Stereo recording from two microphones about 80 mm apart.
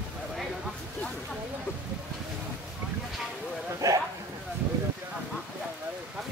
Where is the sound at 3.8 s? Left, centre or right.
Right.